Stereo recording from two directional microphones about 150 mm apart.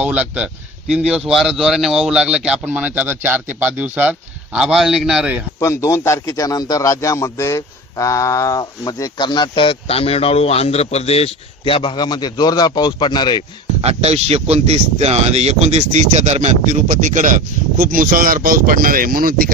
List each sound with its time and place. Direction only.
0.0 s speech: 10° right (ahead or behind)
5.6 s a man's voice: 20° left (ahead or behind)
13.7 s speech: 45° right (ahead or behind); by 19.5 s 75° right (ahead or behind)